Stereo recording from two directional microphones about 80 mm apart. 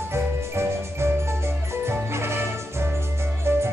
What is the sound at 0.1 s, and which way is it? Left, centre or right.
Music, right.